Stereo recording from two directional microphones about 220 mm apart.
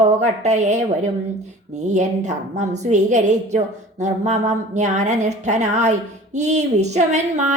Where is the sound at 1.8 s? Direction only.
30° right (ahead or behind).